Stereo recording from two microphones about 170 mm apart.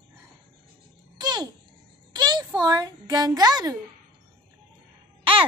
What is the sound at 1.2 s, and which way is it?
Babbling, 25° right (ahead or behind).